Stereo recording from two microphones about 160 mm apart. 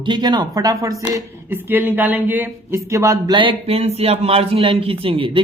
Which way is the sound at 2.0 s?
10° right (ahead or behind).